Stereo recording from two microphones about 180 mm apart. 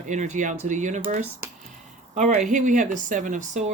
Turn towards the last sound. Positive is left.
turn(degrees=-45)  # may be behind; listen again after turning